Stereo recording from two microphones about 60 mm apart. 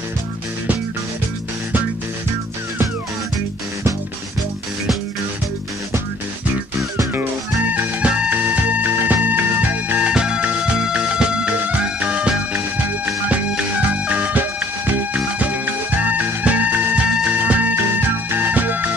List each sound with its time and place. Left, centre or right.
7.2 s music: right
13.6 s music: right